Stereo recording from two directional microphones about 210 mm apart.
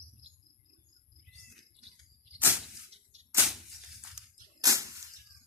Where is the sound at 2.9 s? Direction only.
30° right (ahead or behind).